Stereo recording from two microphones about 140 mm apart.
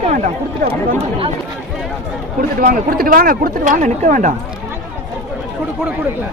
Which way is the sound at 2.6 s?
90° right.